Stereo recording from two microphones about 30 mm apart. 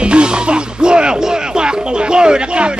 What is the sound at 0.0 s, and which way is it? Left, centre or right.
Music, right.